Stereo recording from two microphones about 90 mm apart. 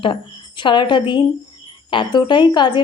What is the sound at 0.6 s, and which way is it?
A woman's voice, 60° left (ahead or behind).